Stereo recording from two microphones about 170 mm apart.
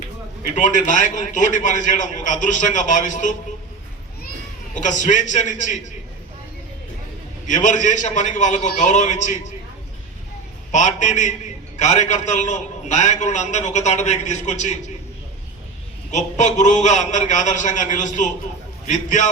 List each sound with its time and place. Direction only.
0.5 s a man's voice: 45° left (ahead or behind)
4.7 s a man's voice: 45° left (ahead or behind)
7.4 s a man's voice: 45° left (ahead or behind)
10.7 s a man's voice: 45° left (ahead or behind)
16.1 s a man's voice: 45° left (ahead or behind)